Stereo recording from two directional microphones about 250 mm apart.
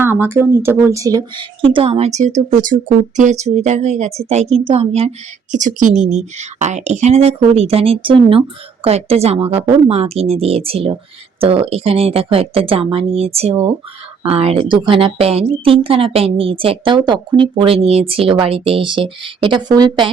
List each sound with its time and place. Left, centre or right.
0.0 s a woman's voice: centre